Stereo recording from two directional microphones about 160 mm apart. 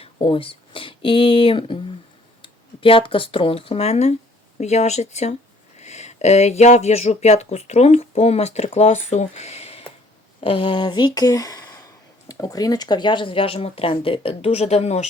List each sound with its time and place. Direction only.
0.0 s speech: 35° left (ahead or behind)